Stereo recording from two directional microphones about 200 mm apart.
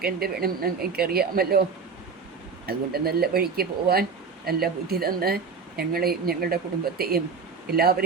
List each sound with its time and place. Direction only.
0.0 s speech: 50° right (ahead or behind)
2.6 s speech: 50° right (ahead or behind)
7.7 s speech: 50° right (ahead or behind)